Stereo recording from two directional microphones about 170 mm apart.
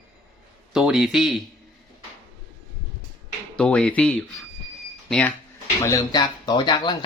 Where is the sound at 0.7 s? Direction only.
5° right (ahead or behind).